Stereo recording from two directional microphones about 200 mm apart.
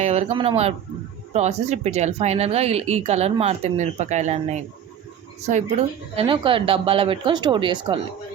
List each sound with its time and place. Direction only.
0.0 s speech: 35° right (ahead or behind)
6.1 s speech: 25° right (ahead or behind)